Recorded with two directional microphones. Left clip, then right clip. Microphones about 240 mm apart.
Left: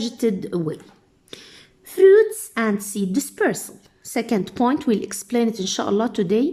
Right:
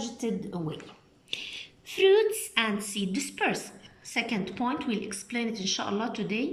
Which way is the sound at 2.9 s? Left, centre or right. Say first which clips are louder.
Left 7 dB; left.